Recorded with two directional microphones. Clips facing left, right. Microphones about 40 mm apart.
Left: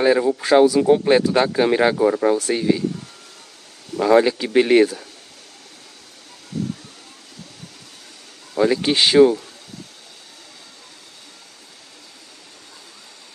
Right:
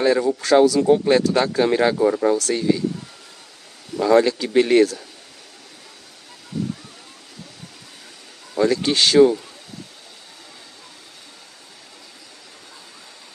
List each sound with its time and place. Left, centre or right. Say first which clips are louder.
0.0 s speech: left 2 dB; centre
4.0 s speech: left 1 dB; centre
8.5 s speech: left 1 dB; centre